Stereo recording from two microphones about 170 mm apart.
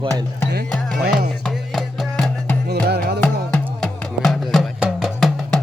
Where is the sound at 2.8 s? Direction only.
75° right (ahead or behind).